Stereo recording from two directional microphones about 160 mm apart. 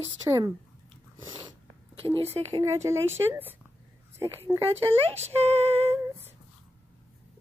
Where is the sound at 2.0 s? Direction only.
40° right (ahead or behind).